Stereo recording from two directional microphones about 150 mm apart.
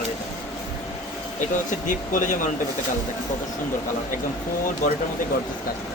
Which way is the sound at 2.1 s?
60° left (ahead or behind).